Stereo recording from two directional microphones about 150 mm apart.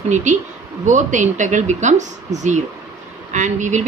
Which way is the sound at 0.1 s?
50° right (ahead or behind).